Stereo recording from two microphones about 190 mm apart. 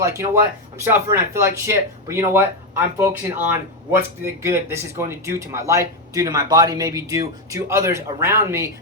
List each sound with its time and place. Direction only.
0.0 s speech: 15° right (ahead or behind)